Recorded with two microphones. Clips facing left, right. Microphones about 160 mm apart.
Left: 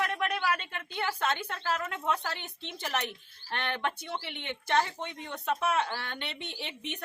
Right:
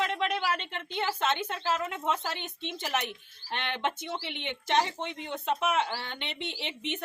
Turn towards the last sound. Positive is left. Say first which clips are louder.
# right 3 dB
turn(degrees=-20)  # may be behind; listen again after turning